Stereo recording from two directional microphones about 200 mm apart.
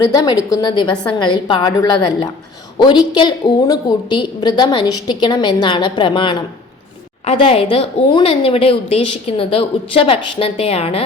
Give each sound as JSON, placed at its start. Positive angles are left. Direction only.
{"t": 0.0, "sound": "a woman's voice", "side_deg": 20}